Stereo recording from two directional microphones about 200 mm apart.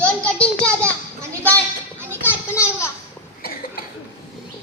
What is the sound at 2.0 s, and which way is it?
Children playing, 10° right (ahead or behind).